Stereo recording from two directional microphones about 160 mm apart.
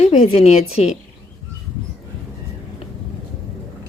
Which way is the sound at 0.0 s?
40° left (ahead or behind).